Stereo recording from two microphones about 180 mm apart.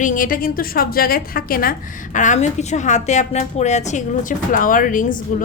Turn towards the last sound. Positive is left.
turn(degrees=50)  # may be behind; listen again after turning